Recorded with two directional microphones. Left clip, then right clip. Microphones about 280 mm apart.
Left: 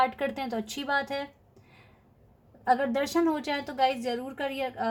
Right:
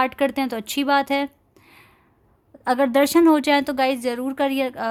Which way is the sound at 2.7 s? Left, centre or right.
Right.